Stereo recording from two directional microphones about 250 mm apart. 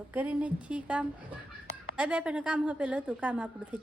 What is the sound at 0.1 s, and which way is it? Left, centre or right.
A woman's voice, centre.